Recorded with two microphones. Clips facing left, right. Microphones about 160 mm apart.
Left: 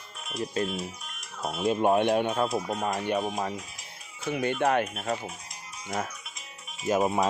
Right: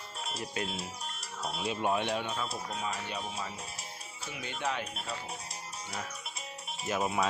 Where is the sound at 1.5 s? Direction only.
45° left (ahead or behind).